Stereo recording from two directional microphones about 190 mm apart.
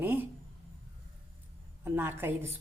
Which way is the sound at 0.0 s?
10° right (ahead or behind).